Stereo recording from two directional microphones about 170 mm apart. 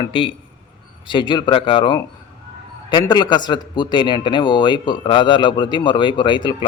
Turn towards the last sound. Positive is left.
turn(degrees=30)  # may be behind; listen again after turning